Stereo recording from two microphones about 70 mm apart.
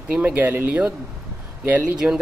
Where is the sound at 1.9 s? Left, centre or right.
Centre.